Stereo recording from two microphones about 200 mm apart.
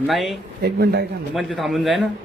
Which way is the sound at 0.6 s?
55° right (ahead or behind).